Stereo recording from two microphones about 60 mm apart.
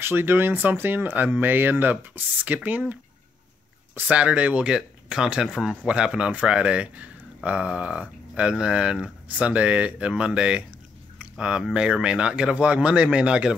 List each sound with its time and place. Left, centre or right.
0.0 s speech: right
3.9 s speech: right